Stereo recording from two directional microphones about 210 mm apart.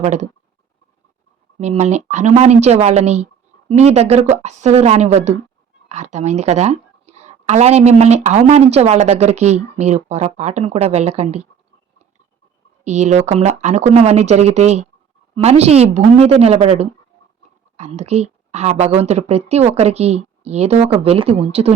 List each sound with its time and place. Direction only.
0.0 s speech: 35° right (ahead or behind)
1.5 s speech: 30° right (ahead or behind)
12.8 s a woman's voice: 35° right (ahead or behind)